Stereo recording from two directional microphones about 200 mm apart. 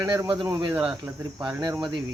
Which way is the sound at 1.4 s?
5° right (ahead or behind).